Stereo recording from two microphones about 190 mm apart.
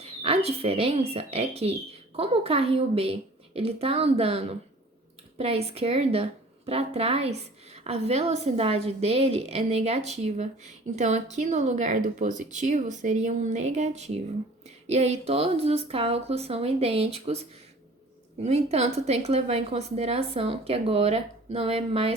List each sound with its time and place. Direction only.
0.0 s a woman's voice: 30° right (ahead or behind)
18.4 s a woman's voice: 35° right (ahead or behind)